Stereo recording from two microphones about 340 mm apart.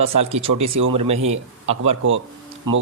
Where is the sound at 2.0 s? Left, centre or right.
Right.